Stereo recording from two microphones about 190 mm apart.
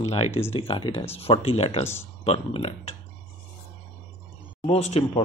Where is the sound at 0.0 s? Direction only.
35° left (ahead or behind).